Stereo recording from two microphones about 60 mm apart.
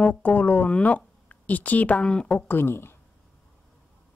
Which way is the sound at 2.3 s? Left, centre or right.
Left.